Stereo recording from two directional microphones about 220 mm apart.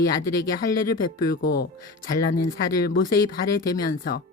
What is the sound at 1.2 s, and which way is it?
Speech, 40° left (ahead or behind).